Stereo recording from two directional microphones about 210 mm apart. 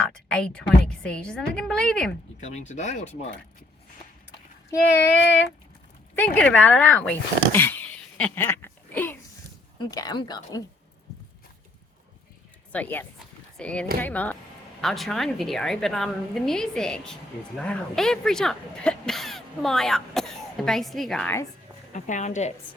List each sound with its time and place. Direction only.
0.0 s speech: 5° left (ahead or behind)
2.4 s speech: 35° left (ahead or behind)
6.1 s speech: 5° left (ahead or behind)
12.7 s speech: 10° left (ahead or behind)
21.9 s speech: 35° left (ahead or behind)